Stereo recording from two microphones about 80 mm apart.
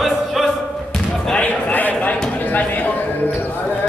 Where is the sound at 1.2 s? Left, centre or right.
Centre.